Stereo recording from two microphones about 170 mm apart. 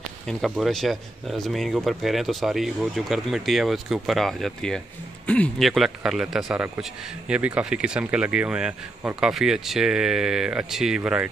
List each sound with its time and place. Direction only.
0.3 s speech: centre (ahead or behind)